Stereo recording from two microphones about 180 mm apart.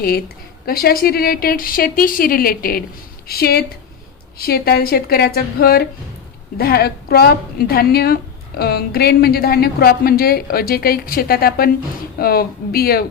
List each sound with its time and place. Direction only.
0.6 s a woman's voice: 55° left (ahead or behind)